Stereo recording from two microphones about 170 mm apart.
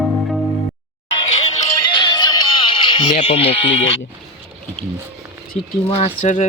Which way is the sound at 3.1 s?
35° left (ahead or behind).